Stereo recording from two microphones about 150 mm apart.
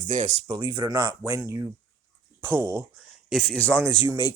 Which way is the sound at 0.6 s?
35° right (ahead or behind).